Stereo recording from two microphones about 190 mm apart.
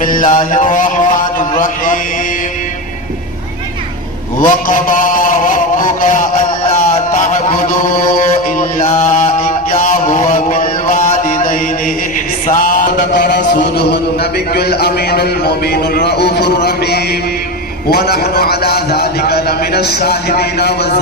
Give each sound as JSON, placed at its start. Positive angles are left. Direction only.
{"t": 0.3, "sound": "a man's voice", "side_deg": 45}
{"t": 4.4, "sound": "a sound", "side_deg": 45}
{"t": 6.7, "sound": "music", "side_deg": 45}
{"t": 9.7, "sound": "mantra", "side_deg": 40}
{"t": 13.0, "sound": "a man's voice", "side_deg": 60}